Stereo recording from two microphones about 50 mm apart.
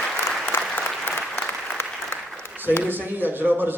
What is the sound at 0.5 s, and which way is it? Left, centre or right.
Applause, left.